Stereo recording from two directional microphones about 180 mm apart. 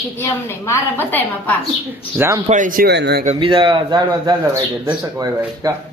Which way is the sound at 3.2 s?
30° right (ahead or behind).